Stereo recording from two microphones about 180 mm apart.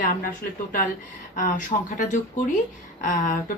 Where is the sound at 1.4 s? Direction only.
45° left (ahead or behind).